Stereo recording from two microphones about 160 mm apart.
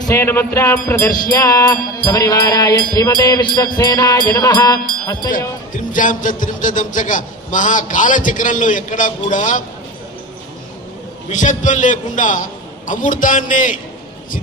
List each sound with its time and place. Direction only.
0.1 s music: 15° left (ahead or behind)
5.0 s speech: 25° left (ahead or behind)
5.9 s a man's voice: 55° left (ahead or behind)
11.2 s a man's voice: 50° left (ahead or behind)